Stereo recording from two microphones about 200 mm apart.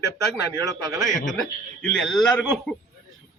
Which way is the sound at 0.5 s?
15° right (ahead or behind).